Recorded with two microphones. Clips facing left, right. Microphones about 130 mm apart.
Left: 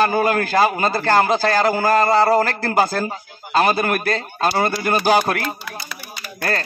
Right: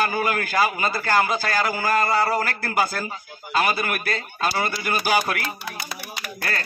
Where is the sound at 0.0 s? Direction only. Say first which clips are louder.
Left 6 dB; 35° left (ahead or behind).